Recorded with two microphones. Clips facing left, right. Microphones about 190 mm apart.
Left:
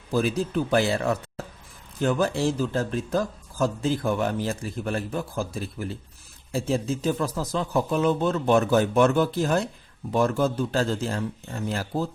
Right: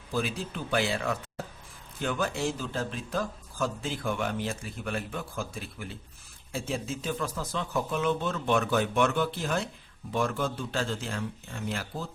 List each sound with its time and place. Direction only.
0.1 s speech: 45° left (ahead or behind)